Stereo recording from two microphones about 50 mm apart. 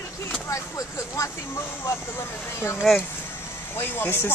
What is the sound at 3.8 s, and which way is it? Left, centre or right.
Speech, left.